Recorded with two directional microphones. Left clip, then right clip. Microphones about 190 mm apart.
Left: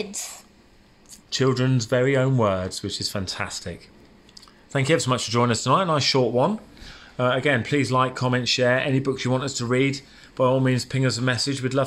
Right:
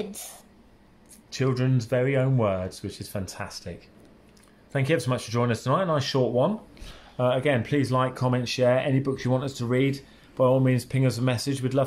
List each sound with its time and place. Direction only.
0.0 s speech: 15° right (ahead or behind)
1.3 s speech: 10° left (ahead or behind)